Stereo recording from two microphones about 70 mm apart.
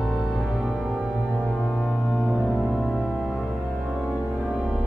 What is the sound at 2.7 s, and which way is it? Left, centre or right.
Music, centre.